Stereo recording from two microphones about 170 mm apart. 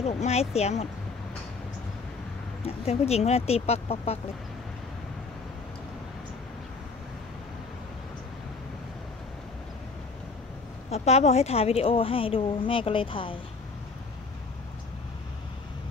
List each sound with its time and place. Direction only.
0.0 s a woman's voice: 40° left (ahead or behind)
2.6 s a woman's voice: 35° left (ahead or behind)
10.9 s a woman's voice: 40° left (ahead or behind)